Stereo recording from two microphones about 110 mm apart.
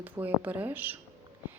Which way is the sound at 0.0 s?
15° right (ahead or behind).